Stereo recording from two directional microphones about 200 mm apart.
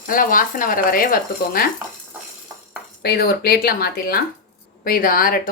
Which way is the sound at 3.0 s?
50° left (ahead or behind).